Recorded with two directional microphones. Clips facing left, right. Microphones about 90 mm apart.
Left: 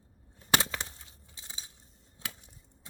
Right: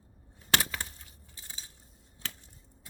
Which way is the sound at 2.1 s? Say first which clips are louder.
Even; 20° left (ahead or behind).